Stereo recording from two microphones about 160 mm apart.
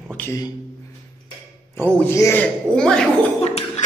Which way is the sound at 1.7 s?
10° left (ahead or behind).